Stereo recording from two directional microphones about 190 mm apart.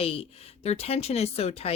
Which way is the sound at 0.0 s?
30° left (ahead or behind).